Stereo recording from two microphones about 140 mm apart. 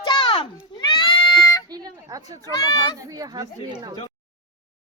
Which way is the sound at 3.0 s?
25° right (ahead or behind).